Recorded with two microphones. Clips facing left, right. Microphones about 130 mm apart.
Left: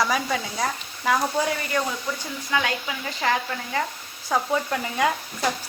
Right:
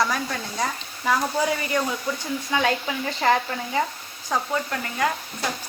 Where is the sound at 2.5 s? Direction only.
20° right (ahead or behind).